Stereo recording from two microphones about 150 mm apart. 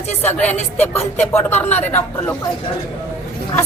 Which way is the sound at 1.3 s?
10° left (ahead or behind).